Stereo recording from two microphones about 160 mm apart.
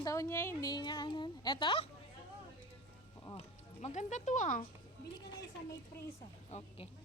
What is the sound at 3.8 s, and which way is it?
Speech, 50° left (ahead or behind).